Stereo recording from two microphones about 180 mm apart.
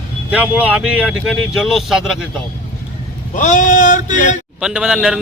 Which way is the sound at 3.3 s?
45° left (ahead or behind).